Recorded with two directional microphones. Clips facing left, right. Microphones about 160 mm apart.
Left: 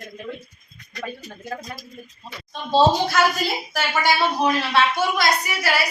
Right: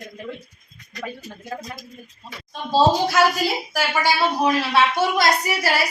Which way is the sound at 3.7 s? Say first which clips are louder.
Left 2 dB; 10° right (ahead or behind).